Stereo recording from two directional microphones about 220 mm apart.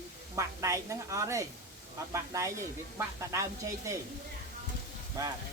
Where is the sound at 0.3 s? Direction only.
15° right (ahead or behind).